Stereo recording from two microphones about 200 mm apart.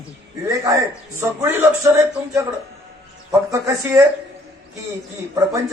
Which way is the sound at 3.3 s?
15° right (ahead or behind).